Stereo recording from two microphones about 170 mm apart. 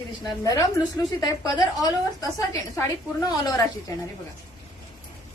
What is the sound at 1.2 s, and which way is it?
A woman's voice, 25° left (ahead or behind).